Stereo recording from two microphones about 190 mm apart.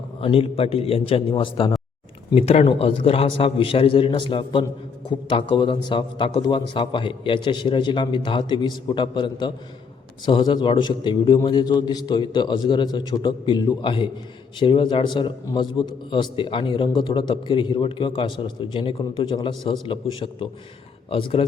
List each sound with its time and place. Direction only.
0.2 s a man's voice: 30° left (ahead or behind)